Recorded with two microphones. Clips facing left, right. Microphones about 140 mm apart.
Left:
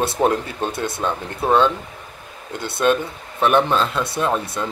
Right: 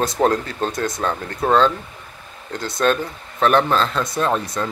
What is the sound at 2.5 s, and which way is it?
Speech, 60° left (ahead or behind).